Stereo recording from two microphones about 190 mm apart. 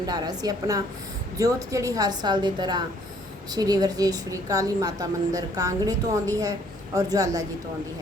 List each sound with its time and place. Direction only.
0.0 s a woman's voice: 20° right (ahead or behind)